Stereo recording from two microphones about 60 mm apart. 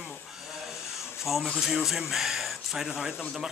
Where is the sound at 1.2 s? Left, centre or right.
Centre.